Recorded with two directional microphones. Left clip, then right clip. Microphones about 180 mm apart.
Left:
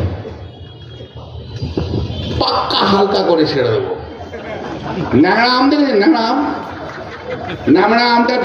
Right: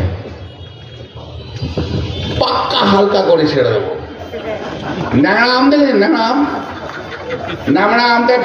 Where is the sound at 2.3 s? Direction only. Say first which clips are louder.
Right 1 dB; 40° left (ahead or behind).